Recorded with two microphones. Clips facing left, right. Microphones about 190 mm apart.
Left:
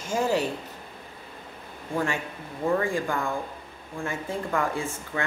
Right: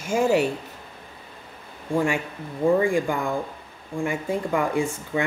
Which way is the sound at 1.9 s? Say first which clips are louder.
Right 5 dB; 10° right (ahead or behind).